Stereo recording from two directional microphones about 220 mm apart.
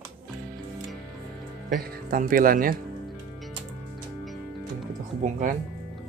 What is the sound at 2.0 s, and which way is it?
Speech, 40° right (ahead or behind).